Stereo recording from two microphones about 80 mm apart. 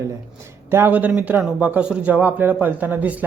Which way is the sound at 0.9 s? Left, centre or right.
Centre.